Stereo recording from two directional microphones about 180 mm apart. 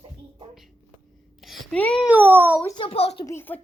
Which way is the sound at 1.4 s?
5° left (ahead or behind).